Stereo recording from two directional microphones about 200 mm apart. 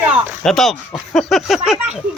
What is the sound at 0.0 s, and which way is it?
Speech, 5° right (ahead or behind).